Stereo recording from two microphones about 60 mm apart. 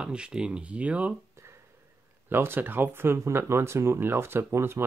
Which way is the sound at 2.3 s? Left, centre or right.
Right.